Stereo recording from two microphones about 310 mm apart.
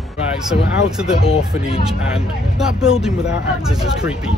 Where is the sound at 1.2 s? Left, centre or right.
Centre.